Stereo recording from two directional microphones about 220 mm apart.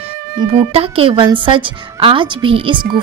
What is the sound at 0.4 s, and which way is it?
A woman's voice, 25° right (ahead or behind).